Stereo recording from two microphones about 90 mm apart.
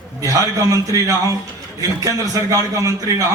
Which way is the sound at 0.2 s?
40° right (ahead or behind).